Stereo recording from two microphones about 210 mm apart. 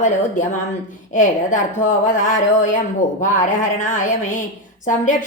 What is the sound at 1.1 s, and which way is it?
A woman's voice, 40° left (ahead or behind).